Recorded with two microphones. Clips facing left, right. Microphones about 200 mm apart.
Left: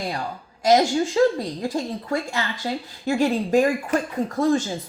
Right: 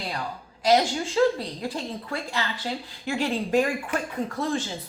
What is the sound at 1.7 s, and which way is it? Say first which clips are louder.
A woman's voice: left 6 dB; 45° left (ahead or behind).